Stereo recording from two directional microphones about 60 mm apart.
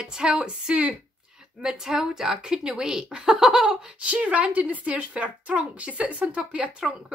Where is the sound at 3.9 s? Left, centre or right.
Right.